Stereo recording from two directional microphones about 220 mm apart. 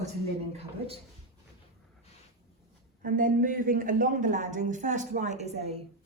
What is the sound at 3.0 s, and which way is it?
Speech, 40° right (ahead or behind).